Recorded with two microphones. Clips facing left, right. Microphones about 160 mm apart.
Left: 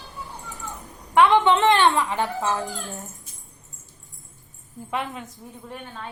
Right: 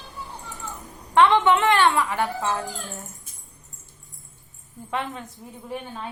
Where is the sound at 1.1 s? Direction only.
15° left (ahead or behind).